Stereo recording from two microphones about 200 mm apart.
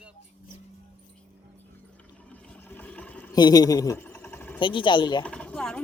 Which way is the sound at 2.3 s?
10° left (ahead or behind).